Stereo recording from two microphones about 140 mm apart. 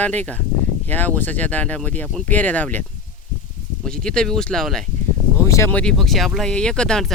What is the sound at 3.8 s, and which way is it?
Speech, 5° left (ahead or behind).